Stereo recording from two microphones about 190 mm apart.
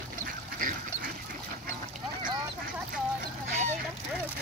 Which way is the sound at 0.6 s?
45° right (ahead or behind).